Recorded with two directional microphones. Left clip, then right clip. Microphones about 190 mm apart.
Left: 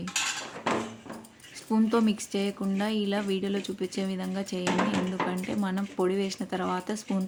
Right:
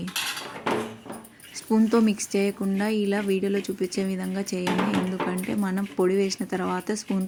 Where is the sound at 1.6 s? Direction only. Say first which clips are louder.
Right 4 dB; 15° right (ahead or behind).